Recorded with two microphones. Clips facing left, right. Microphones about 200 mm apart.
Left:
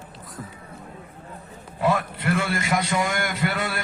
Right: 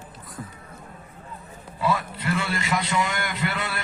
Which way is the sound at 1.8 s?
60° left (ahead or behind).